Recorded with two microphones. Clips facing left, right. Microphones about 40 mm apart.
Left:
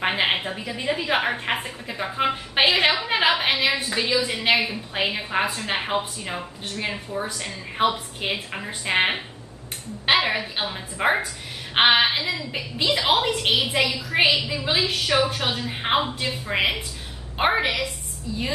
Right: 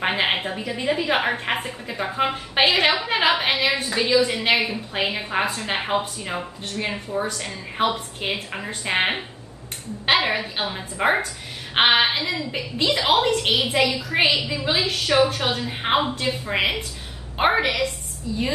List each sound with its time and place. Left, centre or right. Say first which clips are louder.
0.0 s a woman's voice: right 1 dB; centre